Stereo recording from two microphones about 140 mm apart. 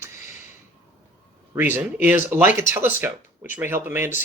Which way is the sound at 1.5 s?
15° right (ahead or behind).